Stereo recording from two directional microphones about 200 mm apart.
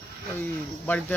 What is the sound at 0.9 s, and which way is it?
Speech, 10° left (ahead or behind).